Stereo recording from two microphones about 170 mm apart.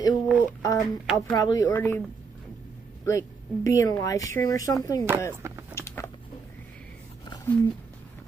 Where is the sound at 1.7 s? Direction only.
10° left (ahead or behind).